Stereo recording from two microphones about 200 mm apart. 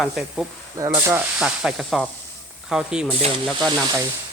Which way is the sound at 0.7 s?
15° right (ahead or behind).